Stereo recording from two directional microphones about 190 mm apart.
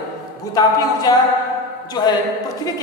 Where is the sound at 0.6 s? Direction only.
20° left (ahead or behind).